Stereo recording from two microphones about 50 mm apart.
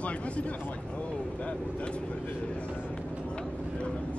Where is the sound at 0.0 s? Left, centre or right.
Left.